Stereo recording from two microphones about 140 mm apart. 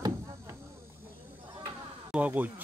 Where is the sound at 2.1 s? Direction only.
10° right (ahead or behind).